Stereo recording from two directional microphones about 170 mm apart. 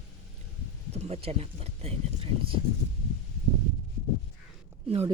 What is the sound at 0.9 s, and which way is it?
Speech, 40° right (ahead or behind).